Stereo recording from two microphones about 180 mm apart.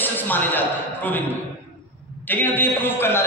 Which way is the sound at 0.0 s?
10° left (ahead or behind).